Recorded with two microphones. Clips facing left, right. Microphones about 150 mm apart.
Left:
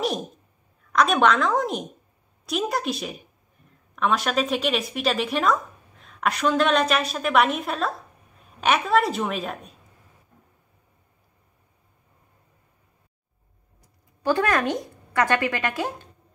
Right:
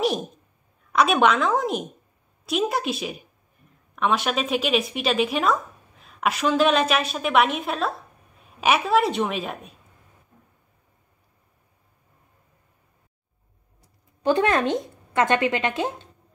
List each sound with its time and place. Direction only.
0.9 s a woman's voice: 5° right (ahead or behind)
14.2 s a woman's voice: 25° right (ahead or behind)